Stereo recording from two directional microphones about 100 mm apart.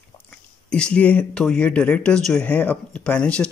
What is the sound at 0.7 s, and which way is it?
Speech, 10° left (ahead or behind).